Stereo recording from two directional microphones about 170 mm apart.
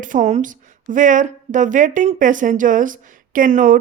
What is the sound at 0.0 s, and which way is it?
Speech, 50° right (ahead or behind).